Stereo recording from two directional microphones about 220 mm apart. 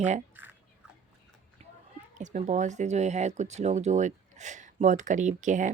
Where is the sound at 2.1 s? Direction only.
35° right (ahead or behind).